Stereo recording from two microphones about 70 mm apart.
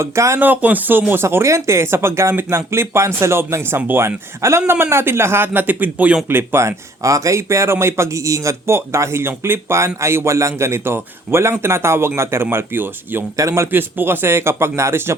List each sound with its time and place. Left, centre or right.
0.0 s speech: right
0.3 s a man's voice: right
4.0 s a man's voice: right
13.3 s speech: right
13.7 s a man's voice: right